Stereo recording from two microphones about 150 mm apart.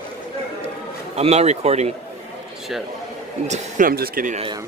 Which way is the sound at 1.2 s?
45° right (ahead or behind).